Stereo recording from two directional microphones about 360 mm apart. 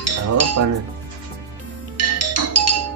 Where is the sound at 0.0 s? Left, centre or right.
Right.